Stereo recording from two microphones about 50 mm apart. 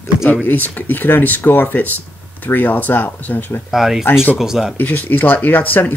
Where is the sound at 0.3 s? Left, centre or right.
Left.